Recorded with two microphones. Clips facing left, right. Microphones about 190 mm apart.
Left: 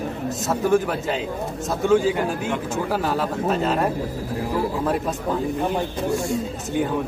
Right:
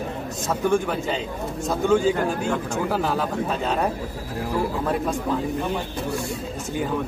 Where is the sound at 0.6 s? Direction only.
5° left (ahead or behind).